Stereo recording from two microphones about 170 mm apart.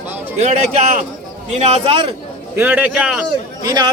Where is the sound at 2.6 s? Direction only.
10° right (ahead or behind).